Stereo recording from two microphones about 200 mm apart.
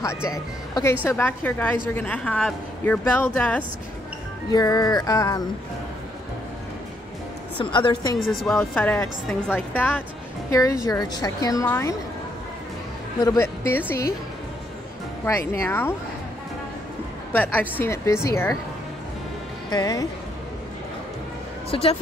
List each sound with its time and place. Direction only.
0.0 s speech: 15° left (ahead or behind)
4.5 s speech: 20° left (ahead or behind)
7.5 s speech: 25° left (ahead or behind)
8.3 s speech: centre (ahead or behind)
13.2 s speech: 15° left (ahead or behind)
15.2 s speech: 15° left (ahead or behind)
17.3 s speech: 10° left (ahead or behind)
19.7 s speech: 15° left (ahead or behind)